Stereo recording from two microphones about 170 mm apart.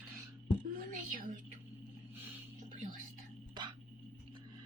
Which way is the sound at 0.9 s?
50° right (ahead or behind).